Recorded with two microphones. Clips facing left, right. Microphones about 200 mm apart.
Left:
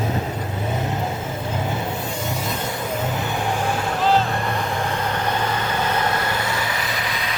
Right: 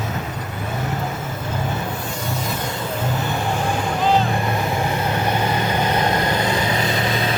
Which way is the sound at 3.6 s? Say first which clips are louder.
Right 1 dB; 5° left (ahead or behind).